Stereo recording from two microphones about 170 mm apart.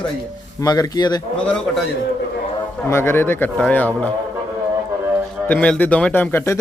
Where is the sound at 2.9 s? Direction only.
15° left (ahead or behind).